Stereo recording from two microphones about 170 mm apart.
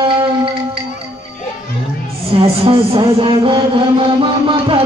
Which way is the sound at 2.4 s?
30° right (ahead or behind).